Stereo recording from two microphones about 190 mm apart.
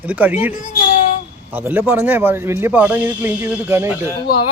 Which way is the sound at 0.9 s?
40° left (ahead or behind).